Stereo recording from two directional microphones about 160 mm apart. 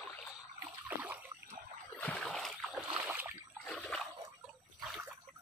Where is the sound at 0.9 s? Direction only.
10° right (ahead or behind).